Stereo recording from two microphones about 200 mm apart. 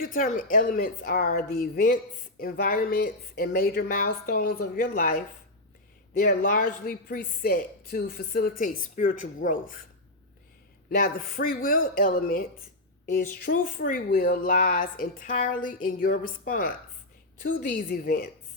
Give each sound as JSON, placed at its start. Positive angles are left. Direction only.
{"t": 0.0, "sound": "speech", "side_deg": 45}
{"t": 10.8, "sound": "speech", "side_deg": 45}